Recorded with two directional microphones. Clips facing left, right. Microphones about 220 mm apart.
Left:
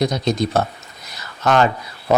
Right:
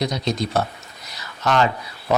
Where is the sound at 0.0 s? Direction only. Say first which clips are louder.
Left 4 dB; 50° left (ahead or behind).